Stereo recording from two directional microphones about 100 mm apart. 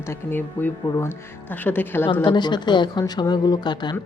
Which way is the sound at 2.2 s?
50° left (ahead or behind).